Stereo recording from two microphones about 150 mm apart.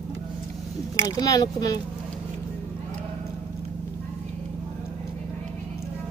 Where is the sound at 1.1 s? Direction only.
25° left (ahead or behind).